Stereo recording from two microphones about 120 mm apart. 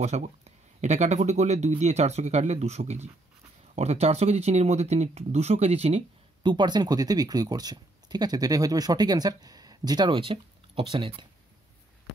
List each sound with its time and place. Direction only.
0.0 s speech: 70° right (ahead or behind)
6.4 s speech: 40° right (ahead or behind)